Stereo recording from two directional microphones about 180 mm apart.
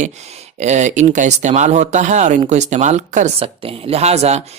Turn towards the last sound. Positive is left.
turn(degrees=-35)  # may be behind; listen again after turning